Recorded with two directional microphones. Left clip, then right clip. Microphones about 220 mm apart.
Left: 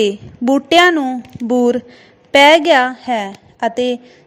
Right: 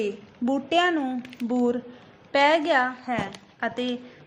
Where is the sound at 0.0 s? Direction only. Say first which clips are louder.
Left 12 dB; 35° left (ahead or behind).